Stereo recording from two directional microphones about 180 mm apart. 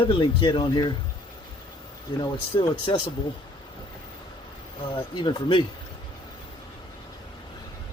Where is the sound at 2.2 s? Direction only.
25° left (ahead or behind).